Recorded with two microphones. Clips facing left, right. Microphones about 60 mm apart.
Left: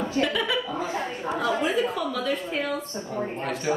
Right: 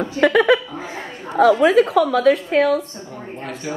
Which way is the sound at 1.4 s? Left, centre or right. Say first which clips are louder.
Right 13 dB; right.